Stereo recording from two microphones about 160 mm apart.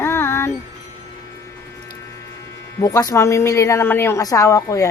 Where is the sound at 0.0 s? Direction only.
15° left (ahead or behind).